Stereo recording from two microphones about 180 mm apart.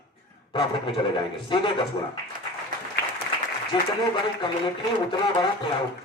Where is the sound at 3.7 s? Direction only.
25° left (ahead or behind).